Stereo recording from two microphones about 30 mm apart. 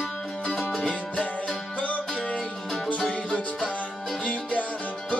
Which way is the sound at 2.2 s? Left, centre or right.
Left.